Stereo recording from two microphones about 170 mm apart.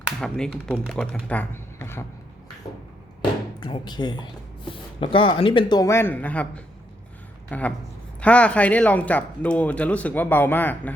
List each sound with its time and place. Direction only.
0.0 s speech: 5° left (ahead or behind)
3.2 s a sound: 25° left (ahead or behind)
4.7 s speech: 30° left (ahead or behind); by 6.5 s 10° left (ahead or behind)
7.5 s speech: 10° left (ahead or behind)